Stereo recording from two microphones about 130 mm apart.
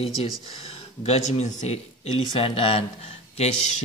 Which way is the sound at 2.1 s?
45° left (ahead or behind).